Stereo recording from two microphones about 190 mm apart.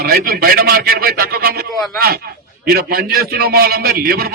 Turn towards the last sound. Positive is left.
turn(degrees=-55)  # may be behind; listen again after turning